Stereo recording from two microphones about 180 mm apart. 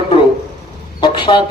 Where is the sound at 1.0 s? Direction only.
25° left (ahead or behind).